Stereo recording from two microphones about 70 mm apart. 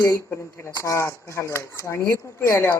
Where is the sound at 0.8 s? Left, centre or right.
Left.